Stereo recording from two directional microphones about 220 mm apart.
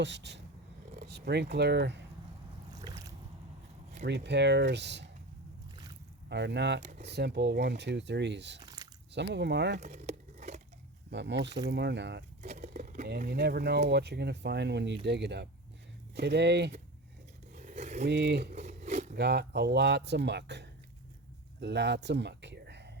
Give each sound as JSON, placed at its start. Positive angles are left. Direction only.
{"t": 0.0, "sound": "speech", "side_deg": -50}
{"t": 4.0, "sound": "speech", "side_deg": -50}
{"t": 6.2, "sound": "speech", "side_deg": -50}
{"t": 8.6, "sound": "chewing", "side_deg": -15}
{"t": 9.1, "sound": "speech", "side_deg": -50}
{"t": 9.8, "sound": "a sound", "side_deg": -30}
{"t": 11.1, "sound": "speech", "side_deg": -50}
{"t": 12.4, "sound": "speech", "side_deg": -30}
{"t": 17.5, "sound": "scrape", "side_deg": -35}
{"t": 18.0, "sound": "speech", "side_deg": -50}
{"t": 18.5, "sound": "a sound", "side_deg": -30}
{"t": 19.1, "sound": "speech", "side_deg": -50}